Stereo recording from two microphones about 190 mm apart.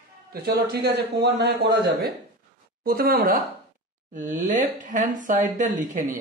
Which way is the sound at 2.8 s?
50° right (ahead or behind).